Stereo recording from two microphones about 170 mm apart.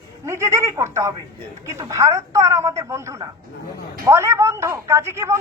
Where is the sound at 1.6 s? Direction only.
15° right (ahead or behind).